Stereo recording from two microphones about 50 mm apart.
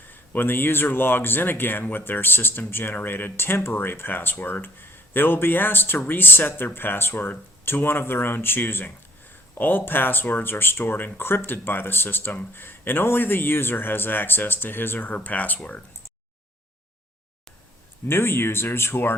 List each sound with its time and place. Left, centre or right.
0.1 s speech: left
18.1 s speech: left